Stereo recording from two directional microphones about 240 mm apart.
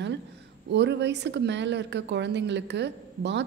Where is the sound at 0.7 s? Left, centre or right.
Right.